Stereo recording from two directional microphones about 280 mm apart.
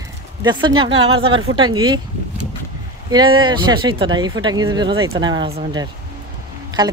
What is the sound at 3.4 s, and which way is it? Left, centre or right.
Speech, centre.